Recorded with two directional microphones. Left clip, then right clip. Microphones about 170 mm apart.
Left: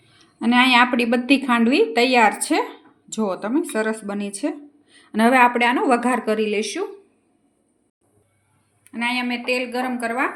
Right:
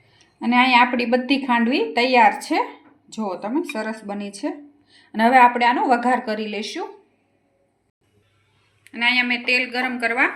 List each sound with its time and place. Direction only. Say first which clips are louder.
0.3 s a woman's voice: even; 55° left (ahead or behind)
8.8 s a woman's voice: right 5 dB; 55° left (ahead or behind)